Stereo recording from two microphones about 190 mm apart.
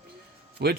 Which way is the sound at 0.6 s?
60° right (ahead or behind).